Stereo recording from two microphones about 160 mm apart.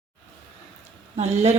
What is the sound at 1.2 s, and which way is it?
Speech, 45° right (ahead or behind).